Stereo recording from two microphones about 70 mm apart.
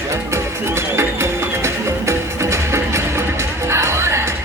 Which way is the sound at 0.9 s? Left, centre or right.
Right.